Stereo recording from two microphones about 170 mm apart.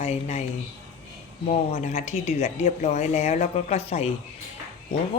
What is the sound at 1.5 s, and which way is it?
Speech, 40° left (ahead or behind).